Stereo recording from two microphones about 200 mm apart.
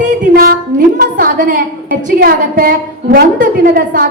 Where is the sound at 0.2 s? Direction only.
45° right (ahead or behind).